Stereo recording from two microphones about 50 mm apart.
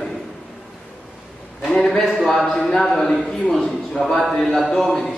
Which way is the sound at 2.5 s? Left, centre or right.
Centre.